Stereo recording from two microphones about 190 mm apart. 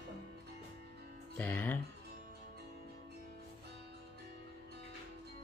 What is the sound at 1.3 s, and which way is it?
Music, 10° left (ahead or behind).